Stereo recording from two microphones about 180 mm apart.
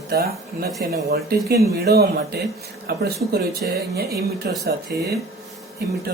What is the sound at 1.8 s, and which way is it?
Speech, 60° right (ahead or behind).